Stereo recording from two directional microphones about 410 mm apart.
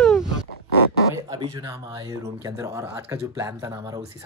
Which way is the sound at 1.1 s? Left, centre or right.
Centre.